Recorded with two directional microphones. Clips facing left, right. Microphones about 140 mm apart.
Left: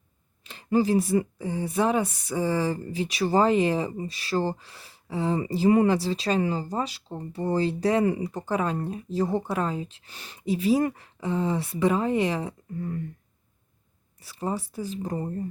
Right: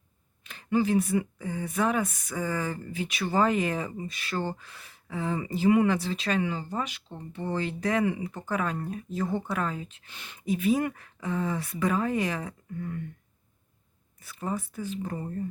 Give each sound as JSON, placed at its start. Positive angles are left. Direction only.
{"t": 0.4, "sound": "speech", "side_deg": 35}
{"t": 14.2, "sound": "speech", "side_deg": 30}